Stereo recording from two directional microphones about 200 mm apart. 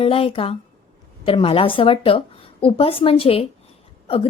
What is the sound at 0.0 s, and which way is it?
A woman's voice, 30° left (ahead or behind).